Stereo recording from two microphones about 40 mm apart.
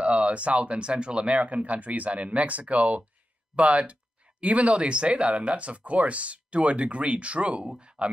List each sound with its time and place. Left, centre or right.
0.0 s speech: right